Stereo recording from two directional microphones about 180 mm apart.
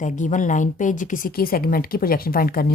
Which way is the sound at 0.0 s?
45° left (ahead or behind).